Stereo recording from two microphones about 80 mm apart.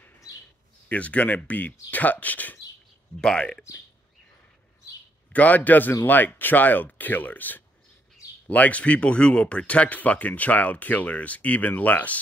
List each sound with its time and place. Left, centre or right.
0.8 s speech: centre
5.3 s speech: centre